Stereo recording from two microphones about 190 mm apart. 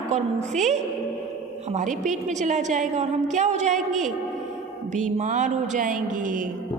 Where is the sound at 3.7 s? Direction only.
Centre (ahead or behind).